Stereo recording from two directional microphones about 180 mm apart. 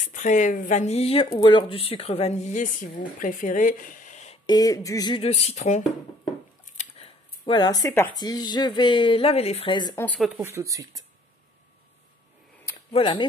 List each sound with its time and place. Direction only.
0.0 s a woman's voice: 45° left (ahead or behind)
4.5 s speech: 20° left (ahead or behind)
5.1 s speech: 35° left (ahead or behind)
9.9 s speech: 5° left (ahead or behind)
10.3 s speech: 15° right (ahead or behind)
12.9 s speech: 25° left (ahead or behind)